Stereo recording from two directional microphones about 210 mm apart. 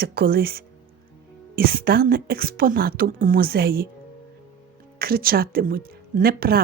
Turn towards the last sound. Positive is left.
turn(degrees=-45)  # may be behind; listen again after turning